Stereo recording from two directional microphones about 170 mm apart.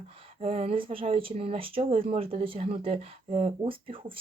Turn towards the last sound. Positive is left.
turn(degrees=-30)  # may be behind; listen again after turning